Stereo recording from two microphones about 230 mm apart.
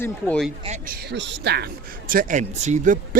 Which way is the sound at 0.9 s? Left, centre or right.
Right.